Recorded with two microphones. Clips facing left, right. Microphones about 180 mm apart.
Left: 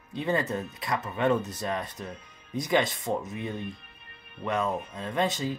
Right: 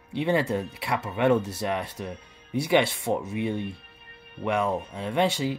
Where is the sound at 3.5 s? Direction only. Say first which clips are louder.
Right 4 dB; 70° right (ahead or behind).